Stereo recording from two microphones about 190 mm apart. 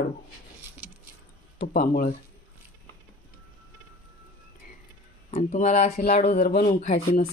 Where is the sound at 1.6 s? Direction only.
45° left (ahead or behind).